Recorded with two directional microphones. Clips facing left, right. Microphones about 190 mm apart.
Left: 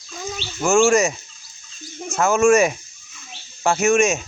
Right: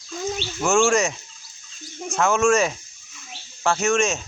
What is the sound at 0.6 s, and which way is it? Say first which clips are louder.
Speech: left 3 dB; centre (ahead or behind).